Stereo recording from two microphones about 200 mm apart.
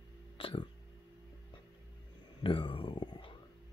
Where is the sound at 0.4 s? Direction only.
25° left (ahead or behind).